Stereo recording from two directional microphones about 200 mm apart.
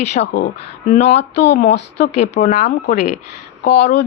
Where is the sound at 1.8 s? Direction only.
60° left (ahead or behind).